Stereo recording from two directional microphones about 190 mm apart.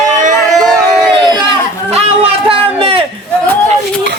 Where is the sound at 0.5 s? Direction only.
Centre (ahead or behind).